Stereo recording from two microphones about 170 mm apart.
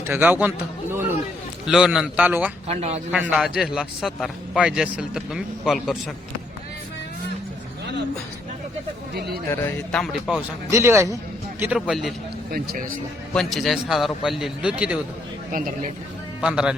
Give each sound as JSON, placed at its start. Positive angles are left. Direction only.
{"t": 0.0, "sound": "a man's voice", "side_deg": -10}
{"t": 2.6, "sound": "speech", "side_deg": -40}
{"t": 3.1, "sound": "a man's voice", "side_deg": -5}
{"t": 9.1, "sound": "speech", "side_deg": -70}
{"t": 9.5, "sound": "speech", "side_deg": 15}
{"t": 10.0, "sound": "a man's voice", "side_deg": 0}
{"t": 10.7, "sound": "a man's voice", "side_deg": -15}
{"t": 11.6, "sound": "a man's voice", "side_deg": -5}
{"t": 12.5, "sound": "speech", "side_deg": -60}
{"t": 13.3, "sound": "a man's voice", "side_deg": 0}
{"t": 16.4, "sound": "a man's voice", "side_deg": -5}